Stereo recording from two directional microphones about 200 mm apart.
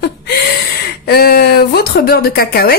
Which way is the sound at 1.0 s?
50° left (ahead or behind).